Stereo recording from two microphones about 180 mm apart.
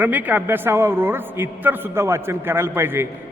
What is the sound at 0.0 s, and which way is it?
A man's voice, 10° right (ahead or behind).